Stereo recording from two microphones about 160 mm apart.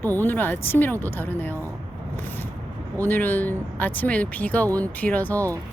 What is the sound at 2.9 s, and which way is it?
Speech, 10° left (ahead or behind).